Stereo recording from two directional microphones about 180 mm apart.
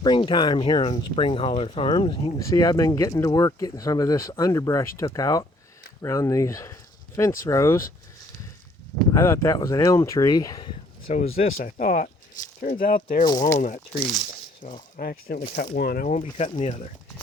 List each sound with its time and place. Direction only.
0.0 s speech: 25° left (ahead or behind)
9.1 s speech: 15° left (ahead or behind)
11.1 s speech: 40° left (ahead or behind)
11.5 s speech: 50° left (ahead or behind)
14.0 s speech: centre (ahead or behind)
14.6 s speech: 45° left (ahead or behind)
14.9 s speech: 55° left (ahead or behind)
16.0 s speech: 40° left (ahead or behind)